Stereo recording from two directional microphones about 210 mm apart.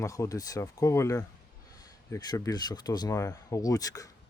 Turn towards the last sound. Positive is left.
turn(degrees=15)  # may be behind; listen again after turning